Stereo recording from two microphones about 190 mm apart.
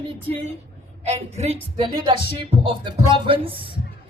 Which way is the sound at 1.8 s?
25° right (ahead or behind).